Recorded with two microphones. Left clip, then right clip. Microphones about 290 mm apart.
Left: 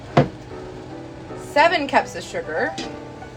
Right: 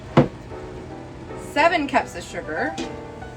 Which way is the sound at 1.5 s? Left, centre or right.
Centre.